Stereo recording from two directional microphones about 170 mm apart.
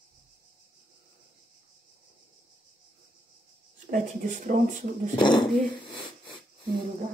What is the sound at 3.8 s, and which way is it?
Speech, 50° right (ahead or behind).